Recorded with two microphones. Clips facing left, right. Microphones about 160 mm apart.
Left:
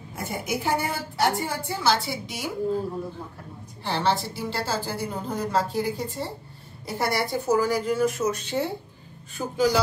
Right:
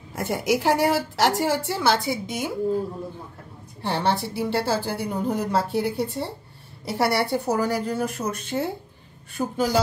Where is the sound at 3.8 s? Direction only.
60° right (ahead or behind).